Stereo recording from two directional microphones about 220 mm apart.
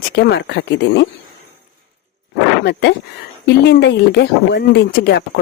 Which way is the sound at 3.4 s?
50° left (ahead or behind).